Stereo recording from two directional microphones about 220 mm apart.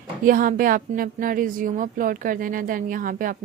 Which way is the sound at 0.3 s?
40° right (ahead or behind).